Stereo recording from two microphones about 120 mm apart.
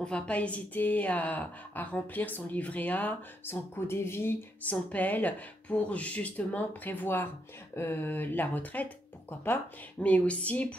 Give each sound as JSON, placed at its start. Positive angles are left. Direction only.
{"t": 0.0, "sound": "a woman's voice", "side_deg": 10}